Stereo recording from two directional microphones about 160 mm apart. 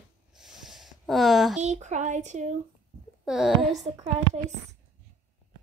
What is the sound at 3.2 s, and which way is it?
Speech, centre (ahead or behind).